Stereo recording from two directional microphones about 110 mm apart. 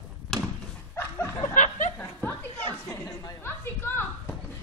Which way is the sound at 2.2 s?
20° left (ahead or behind).